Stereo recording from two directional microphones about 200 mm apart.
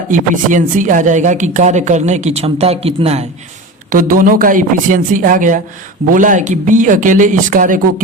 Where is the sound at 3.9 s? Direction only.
45° right (ahead or behind).